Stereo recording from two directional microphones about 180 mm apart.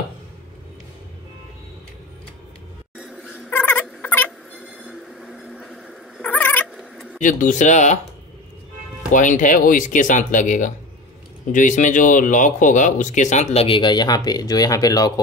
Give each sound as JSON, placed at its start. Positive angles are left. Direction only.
{"t": 3.0, "sound": "dog", "side_deg": 0}
{"t": 3.4, "sound": "a sound", "side_deg": 10}
{"t": 4.6, "sound": "dog", "side_deg": -5}
{"t": 7.2, "sound": "speech", "side_deg": 45}
{"t": 9.1, "sound": "speech", "side_deg": 45}